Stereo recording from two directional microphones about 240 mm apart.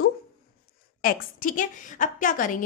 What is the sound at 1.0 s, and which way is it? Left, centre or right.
Speech, left.